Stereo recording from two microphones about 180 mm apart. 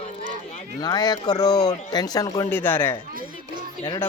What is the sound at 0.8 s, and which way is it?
Speech, 20° left (ahead or behind).